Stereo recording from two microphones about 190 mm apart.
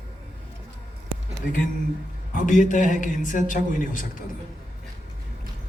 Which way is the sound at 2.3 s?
40° left (ahead or behind).